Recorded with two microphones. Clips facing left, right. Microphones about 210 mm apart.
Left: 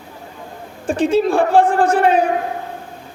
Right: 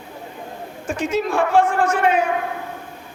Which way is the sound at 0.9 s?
30° left (ahead or behind).